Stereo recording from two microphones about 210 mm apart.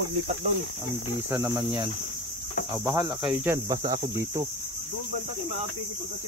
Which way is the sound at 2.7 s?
15° right (ahead or behind).